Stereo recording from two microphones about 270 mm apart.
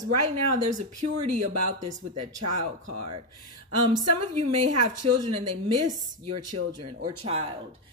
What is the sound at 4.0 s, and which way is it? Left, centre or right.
A woman's voice, right.